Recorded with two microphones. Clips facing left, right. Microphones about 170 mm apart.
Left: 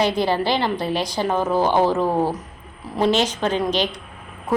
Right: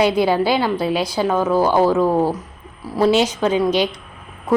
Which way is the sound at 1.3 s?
15° left (ahead or behind).